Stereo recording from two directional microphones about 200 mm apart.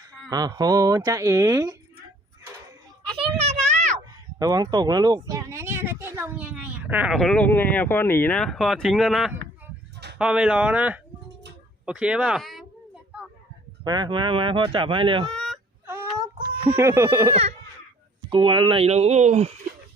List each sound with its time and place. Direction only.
0.3 s speech: 20° right (ahead or behind)
3.2 s a sound: 30° right (ahead or behind)
4.4 s speech: 20° right (ahead or behind); by 12.6 s centre (ahead or behind)
13.8 s speech: 20° right (ahead or behind)
15.3 s fowl: 5° left (ahead or behind)
15.9 s baby cry: 15° right (ahead or behind)
18.3 s speech: 25° right (ahead or behind)